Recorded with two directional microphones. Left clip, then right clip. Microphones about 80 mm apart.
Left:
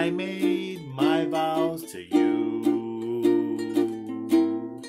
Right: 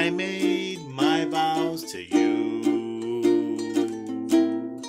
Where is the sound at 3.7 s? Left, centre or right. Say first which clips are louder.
Even; right.